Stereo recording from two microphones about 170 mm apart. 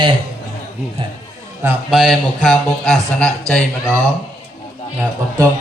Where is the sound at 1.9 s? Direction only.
Centre (ahead or behind).